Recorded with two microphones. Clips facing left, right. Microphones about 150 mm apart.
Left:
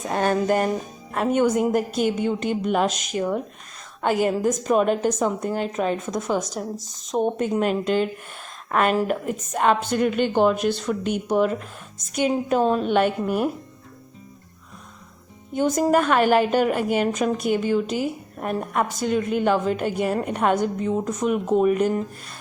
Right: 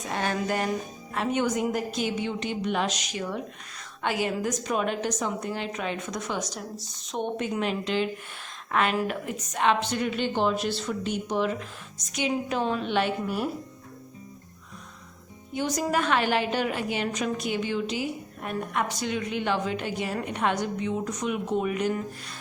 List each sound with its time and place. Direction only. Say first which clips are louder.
0.1 s a woman's voice: left 7 dB; 45° left (ahead or behind)
15.5 s a woman's voice: left 7 dB; 45° left (ahead or behind)